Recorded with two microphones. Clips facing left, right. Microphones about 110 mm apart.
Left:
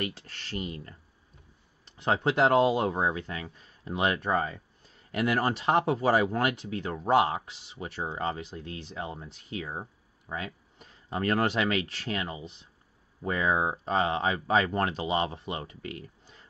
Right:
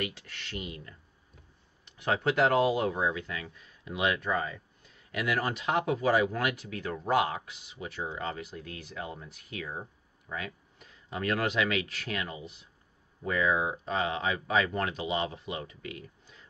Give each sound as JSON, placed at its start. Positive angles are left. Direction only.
{"t": 0.0, "sound": "speech", "side_deg": 35}